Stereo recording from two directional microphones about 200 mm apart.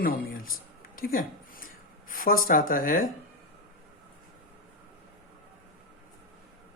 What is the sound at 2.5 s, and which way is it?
Speech, 45° left (ahead or behind).